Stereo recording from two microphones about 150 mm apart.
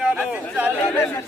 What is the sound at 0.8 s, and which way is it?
Speech, 15° left (ahead or behind).